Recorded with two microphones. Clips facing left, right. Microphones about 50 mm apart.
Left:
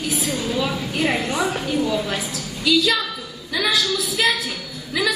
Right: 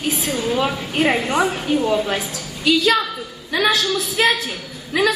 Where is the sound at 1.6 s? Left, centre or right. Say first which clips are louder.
Right 3 dB; right.